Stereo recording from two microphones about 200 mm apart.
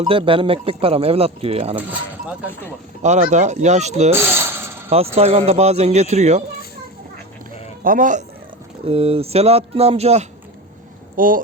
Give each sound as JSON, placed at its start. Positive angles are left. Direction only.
{"t": 0.0, "sound": "speech", "side_deg": -25}
{"t": 1.7, "sound": "speech", "side_deg": -10}
{"t": 2.5, "sound": "speech", "side_deg": 10}
{"t": 3.0, "sound": "speech", "side_deg": -35}
{"t": 4.1, "sound": "coin", "side_deg": -10}
{"t": 4.9, "sound": "speech", "side_deg": -30}
{"t": 7.9, "sound": "speech", "side_deg": -40}
{"t": 8.8, "sound": "speech", "side_deg": -30}
{"t": 11.2, "sound": "speech", "side_deg": -40}